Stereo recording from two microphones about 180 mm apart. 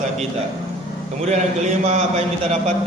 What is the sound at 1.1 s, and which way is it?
Mantra, 40° right (ahead or behind).